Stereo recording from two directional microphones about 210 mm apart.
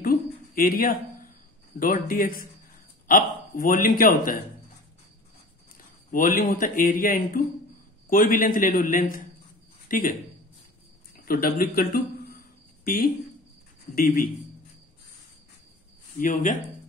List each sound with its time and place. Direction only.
0.6 s speech: 45° left (ahead or behind)
6.1 s speech: 40° left (ahead or behind)
11.2 s speech: 45° left (ahead or behind)
13.9 s speech: 45° left (ahead or behind)
16.2 s speech: 40° left (ahead or behind)